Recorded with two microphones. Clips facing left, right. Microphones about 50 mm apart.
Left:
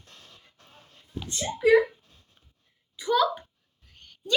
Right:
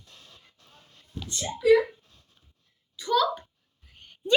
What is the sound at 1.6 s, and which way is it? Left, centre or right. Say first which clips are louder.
Speech: even; left.